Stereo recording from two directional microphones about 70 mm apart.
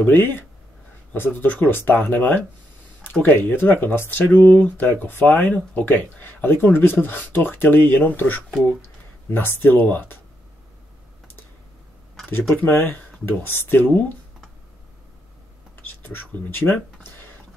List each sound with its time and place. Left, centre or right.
0.0 s speech: left
4.4 s speech: centre
9.7 s speech: left
12.5 s speech: left
16.1 s speech: left